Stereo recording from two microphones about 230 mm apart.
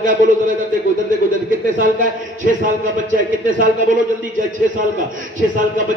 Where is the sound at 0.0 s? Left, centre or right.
Right.